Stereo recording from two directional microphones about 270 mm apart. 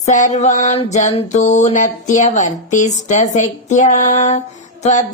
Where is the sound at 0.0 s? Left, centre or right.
Left.